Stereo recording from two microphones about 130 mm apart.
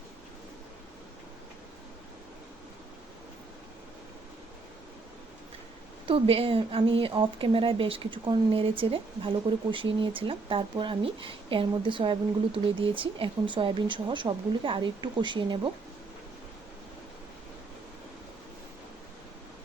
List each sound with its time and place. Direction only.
6.1 s a woman's voice: 45° right (ahead or behind)